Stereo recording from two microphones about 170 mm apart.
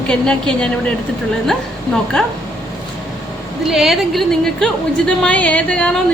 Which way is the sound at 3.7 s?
Centre (ahead or behind).